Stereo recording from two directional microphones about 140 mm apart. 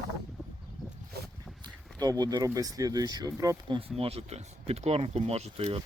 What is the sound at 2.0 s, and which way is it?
Speech, 30° right (ahead or behind).